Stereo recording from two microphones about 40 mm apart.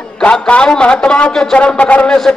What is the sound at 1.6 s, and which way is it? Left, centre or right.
Speech, left.